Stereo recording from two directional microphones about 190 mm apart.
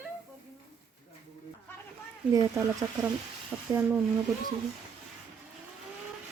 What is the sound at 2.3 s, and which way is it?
Speech, 15° right (ahead or behind).